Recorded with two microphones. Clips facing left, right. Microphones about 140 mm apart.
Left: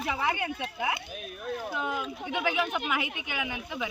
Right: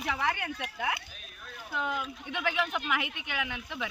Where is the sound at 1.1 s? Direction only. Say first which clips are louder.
Left 13 dB; 55° left (ahead or behind).